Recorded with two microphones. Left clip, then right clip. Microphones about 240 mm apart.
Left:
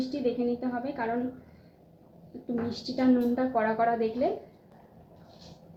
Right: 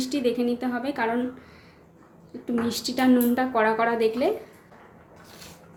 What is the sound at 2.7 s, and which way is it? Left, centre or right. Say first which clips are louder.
A woman's voice: right 4 dB; right.